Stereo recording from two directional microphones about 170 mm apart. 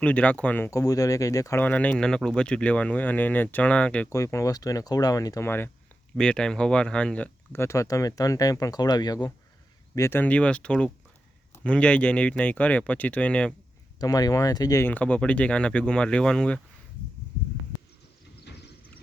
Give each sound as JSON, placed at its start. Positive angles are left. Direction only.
{"t": 0.0, "sound": "speech", "side_deg": 10}
{"t": 4.1, "sound": "speech", "side_deg": 20}
{"t": 14.0, "sound": "speech", "side_deg": 20}